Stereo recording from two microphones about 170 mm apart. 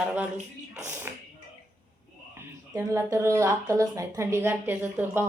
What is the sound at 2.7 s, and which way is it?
Speech, 15° right (ahead or behind).